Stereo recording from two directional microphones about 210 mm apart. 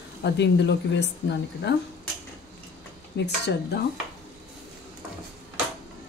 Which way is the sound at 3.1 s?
55° left (ahead or behind).